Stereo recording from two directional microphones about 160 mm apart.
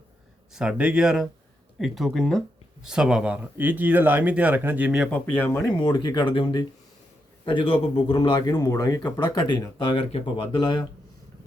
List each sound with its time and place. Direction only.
0.5 s speech: 5° right (ahead or behind)
5.1 s speech: 10° left (ahead or behind)
5.7 s speech: 30° left (ahead or behind)